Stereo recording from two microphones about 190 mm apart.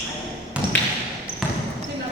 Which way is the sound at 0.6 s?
25° right (ahead or behind).